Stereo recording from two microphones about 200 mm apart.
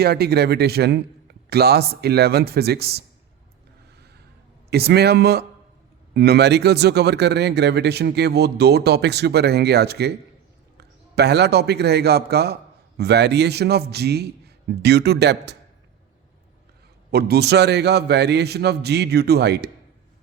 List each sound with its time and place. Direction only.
0.0 s a man's voice: 50° right (ahead or behind)
4.7 s a man's voice: 55° right (ahead or behind)
17.1 s speech: 50° right (ahead or behind)